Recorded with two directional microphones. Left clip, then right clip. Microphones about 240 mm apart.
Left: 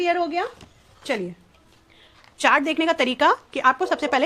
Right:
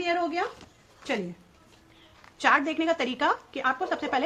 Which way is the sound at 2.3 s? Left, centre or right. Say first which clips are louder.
Left 4 dB; left.